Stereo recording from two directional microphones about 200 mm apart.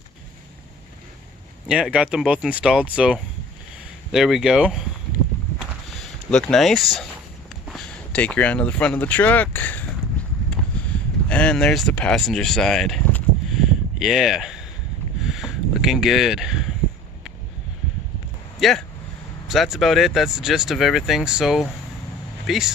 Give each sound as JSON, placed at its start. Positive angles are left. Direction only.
{"t": 1.6, "sound": "speech", "side_deg": -5}
{"t": 5.9, "sound": "speech", "side_deg": 0}
{"t": 10.5, "sound": "a sound", "side_deg": 5}
{"t": 19.5, "sound": "speech", "side_deg": 0}